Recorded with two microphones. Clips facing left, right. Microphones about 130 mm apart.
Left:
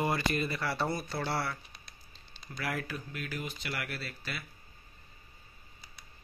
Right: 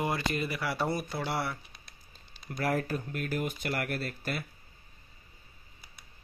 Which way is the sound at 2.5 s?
45° right (ahead or behind).